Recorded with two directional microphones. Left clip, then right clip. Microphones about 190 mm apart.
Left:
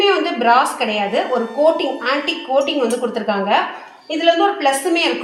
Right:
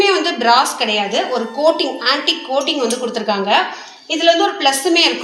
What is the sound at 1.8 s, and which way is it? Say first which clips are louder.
A woman's voice: right 2 dB; 15° left (ahead or behind).